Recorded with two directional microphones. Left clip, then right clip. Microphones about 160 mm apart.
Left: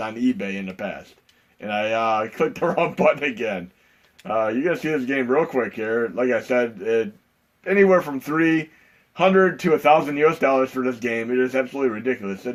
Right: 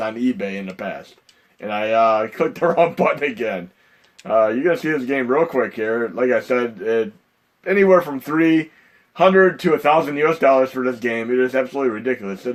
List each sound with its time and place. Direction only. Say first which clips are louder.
0.0 s speech: right 3 dB; 50° right (ahead or behind)